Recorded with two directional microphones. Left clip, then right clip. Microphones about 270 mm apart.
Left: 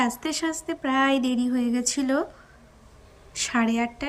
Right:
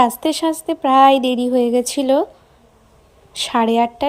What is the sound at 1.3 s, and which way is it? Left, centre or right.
Speech, right.